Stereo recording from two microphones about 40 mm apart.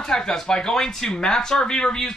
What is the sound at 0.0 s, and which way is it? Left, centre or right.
A man's voice, centre.